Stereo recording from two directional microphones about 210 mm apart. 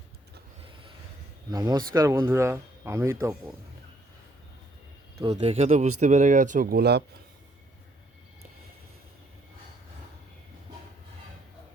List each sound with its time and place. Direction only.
0.6 s rub: 25° right (ahead or behind)
1.5 s speech: 20° right (ahead or behind)
5.3 s speech: 30° right (ahead or behind); by 7.0 s 50° right (ahead or behind)